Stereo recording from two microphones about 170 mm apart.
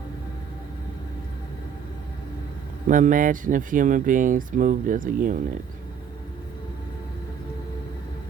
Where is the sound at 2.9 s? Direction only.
50° right (ahead or behind).